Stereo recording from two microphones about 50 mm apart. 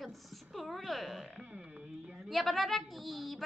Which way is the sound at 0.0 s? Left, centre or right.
Centre.